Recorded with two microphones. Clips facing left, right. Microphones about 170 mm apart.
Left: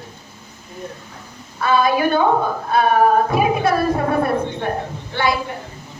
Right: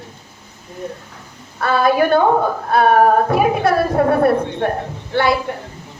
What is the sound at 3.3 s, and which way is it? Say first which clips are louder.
Speech: right 2 dB; 60° right (ahead or behind).